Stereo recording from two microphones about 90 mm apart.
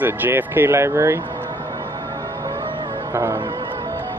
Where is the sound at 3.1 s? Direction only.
30° right (ahead or behind).